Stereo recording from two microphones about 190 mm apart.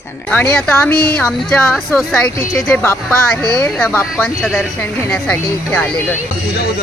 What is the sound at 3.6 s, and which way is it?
Speech, 10° left (ahead or behind).